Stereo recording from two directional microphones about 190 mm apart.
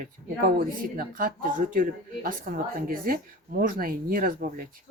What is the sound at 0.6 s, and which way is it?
Speech, 45° right (ahead or behind).